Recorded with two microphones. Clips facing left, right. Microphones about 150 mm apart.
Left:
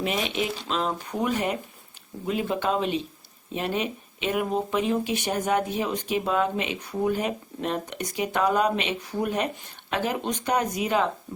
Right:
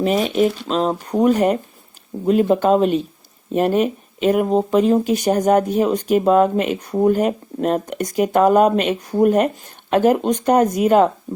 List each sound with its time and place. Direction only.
0.0 s speech: 40° right (ahead or behind)